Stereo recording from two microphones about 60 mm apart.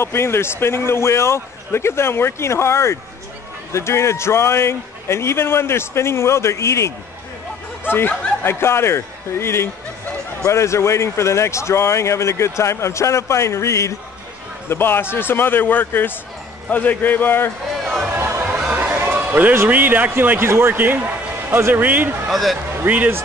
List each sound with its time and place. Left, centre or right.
0.0 s speech: left
7.8 s speech: left
14.7 s speech: left
17.8 s music: centre
18.1 s music: right
18.5 s music: right
18.9 s a sound: right
19.7 s a man's voice: right
21.8 s a man's voice: right
22.3 s speech: centre
22.8 s a man's voice: right